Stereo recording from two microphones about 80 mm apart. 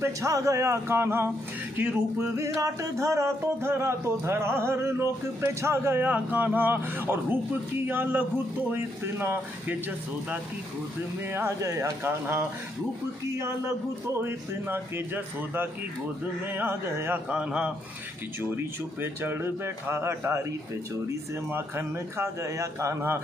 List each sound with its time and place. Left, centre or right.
0.0 s a man's voice: right
1.8 s music: right
11.2 s a man's voice: right
14.2 s music: right
17.3 s speech: centre
18.4 s a man's voice: right